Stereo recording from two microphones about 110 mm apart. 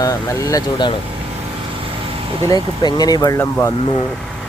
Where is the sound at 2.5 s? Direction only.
35° left (ahead or behind).